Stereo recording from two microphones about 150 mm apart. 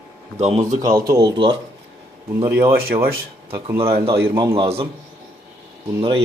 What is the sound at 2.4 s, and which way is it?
Speech, 15° right (ahead or behind).